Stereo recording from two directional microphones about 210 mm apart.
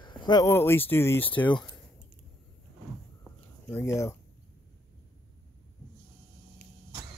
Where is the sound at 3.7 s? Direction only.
15° left (ahead or behind).